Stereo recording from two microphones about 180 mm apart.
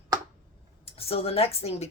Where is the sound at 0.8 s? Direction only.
30° left (ahead or behind).